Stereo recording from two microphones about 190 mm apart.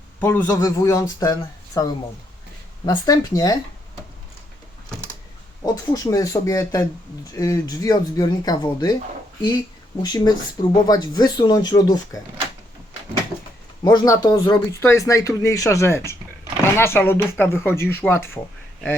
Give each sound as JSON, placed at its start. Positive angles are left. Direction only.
{"t": 0.2, "sound": "speech", "side_deg": 10}
{"t": 5.9, "sound": "speech", "side_deg": 20}
{"t": 10.0, "sound": "speech", "side_deg": 20}
{"t": 13.8, "sound": "speech", "side_deg": 20}